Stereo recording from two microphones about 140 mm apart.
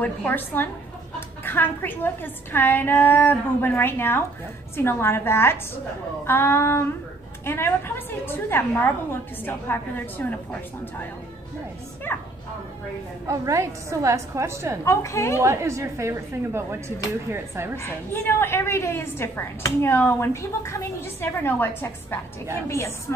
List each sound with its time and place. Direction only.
0.0 s a woman's voice: 15° left (ahead or behind)
12.1 s a woman's voice: 15° left (ahead or behind)
13.3 s a woman's voice: 20° right (ahead or behind)
14.9 s a woman's voice: 20° left (ahead or behind)
15.4 s a woman's voice: 20° right (ahead or behind)
18.4 s a woman's voice: 15° left (ahead or behind)